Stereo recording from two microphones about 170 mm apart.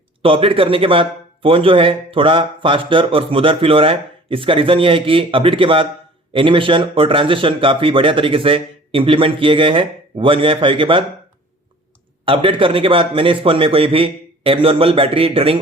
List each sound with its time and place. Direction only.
0.2 s a man's voice: 30° right (ahead or behind)
12.2 s a man's voice: 30° right (ahead or behind)